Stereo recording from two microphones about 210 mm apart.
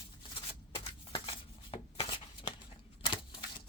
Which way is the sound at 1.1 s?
25° left (ahead or behind).